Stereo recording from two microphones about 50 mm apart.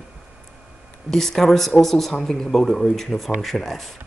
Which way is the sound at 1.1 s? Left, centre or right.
Centre.